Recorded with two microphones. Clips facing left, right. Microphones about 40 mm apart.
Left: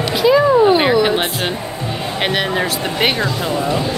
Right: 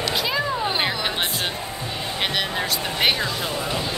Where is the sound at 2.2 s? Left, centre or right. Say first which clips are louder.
Left 7 dB; left.